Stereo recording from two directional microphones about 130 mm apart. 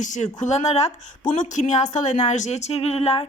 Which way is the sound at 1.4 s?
70° left (ahead or behind).